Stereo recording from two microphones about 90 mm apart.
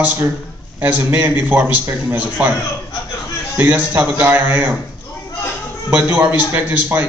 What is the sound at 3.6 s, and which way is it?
A man's voice, 15° right (ahead or behind).